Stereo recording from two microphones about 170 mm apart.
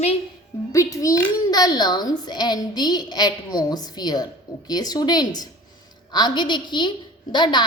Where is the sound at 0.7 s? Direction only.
20° left (ahead or behind).